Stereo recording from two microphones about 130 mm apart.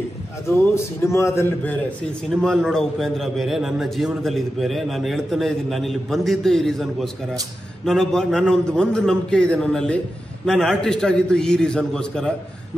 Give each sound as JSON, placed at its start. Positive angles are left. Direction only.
{"t": 0.6, "sound": "speech", "side_deg": 20}
{"t": 2.2, "sound": "a man's voice", "side_deg": 0}